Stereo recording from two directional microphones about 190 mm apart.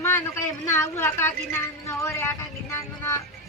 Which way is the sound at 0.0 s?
15° left (ahead or behind).